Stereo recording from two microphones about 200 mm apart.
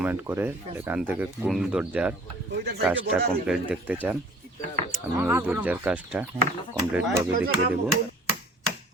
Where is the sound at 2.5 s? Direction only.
55° right (ahead or behind).